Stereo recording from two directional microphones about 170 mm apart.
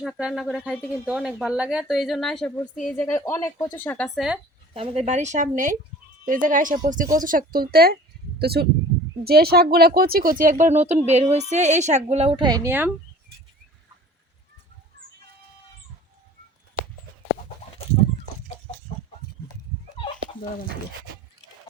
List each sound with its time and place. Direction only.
0.0 s a woman's voice: 5° right (ahead or behind)
4.7 s speech: 35° right (ahead or behind); by 12.9 s 15° right (ahead or behind)